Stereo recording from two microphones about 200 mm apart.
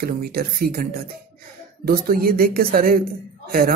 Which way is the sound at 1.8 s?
45° right (ahead or behind).